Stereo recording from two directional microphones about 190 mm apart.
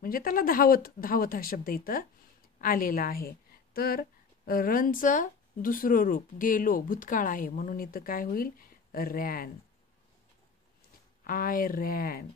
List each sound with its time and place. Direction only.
0.0 s a woman's voice: 50° left (ahead or behind)
11.2 s speech: 50° left (ahead or behind)